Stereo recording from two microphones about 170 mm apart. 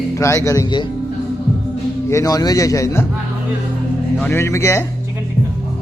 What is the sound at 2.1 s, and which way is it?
Speech, 20° left (ahead or behind).